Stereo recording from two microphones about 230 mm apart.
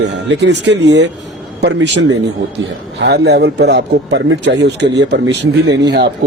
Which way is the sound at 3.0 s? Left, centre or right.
Right.